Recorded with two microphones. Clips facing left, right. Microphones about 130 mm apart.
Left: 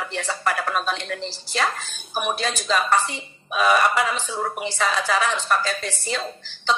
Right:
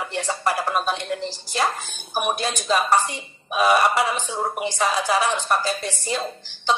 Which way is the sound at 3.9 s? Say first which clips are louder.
Right 1 dB; 30° right (ahead or behind).